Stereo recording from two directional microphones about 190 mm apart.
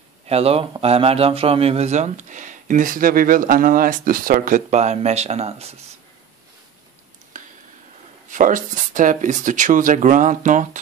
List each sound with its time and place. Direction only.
0.3 s speech: 30° right (ahead or behind)
8.3 s speech: 45° right (ahead or behind)